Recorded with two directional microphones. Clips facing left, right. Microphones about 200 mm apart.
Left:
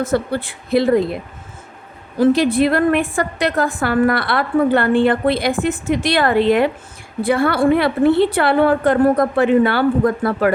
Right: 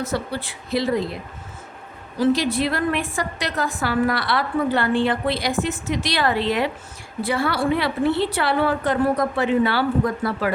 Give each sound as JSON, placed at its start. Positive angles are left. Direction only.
{"t": 0.0, "sound": "a woman's voice", "side_deg": 55}